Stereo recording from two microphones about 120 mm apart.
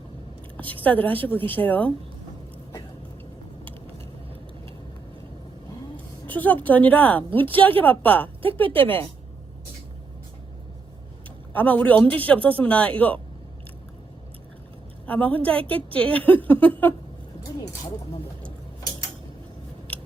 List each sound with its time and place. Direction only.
0.5 s a sound: 15° left (ahead or behind)
0.9 s a man's voice: 15° left (ahead or behind)
6.2 s a woman's voice: 15° left (ahead or behind)
11.5 s a man's voice: 15° left (ahead or behind)
15.0 s a woman's voice: 15° left (ahead or behind)